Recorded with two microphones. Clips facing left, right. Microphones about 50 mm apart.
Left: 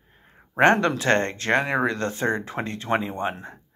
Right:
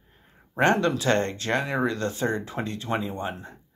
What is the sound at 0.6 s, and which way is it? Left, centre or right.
Speech, left.